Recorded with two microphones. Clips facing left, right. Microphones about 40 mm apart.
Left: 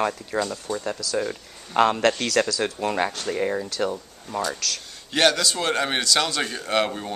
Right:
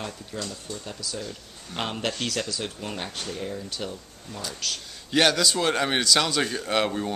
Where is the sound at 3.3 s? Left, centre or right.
Left.